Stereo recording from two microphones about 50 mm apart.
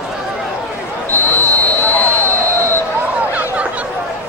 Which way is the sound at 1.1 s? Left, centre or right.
Left.